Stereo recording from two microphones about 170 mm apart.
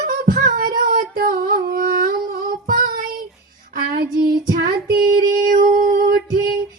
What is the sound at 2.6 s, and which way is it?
Child singing, 55° right (ahead or behind).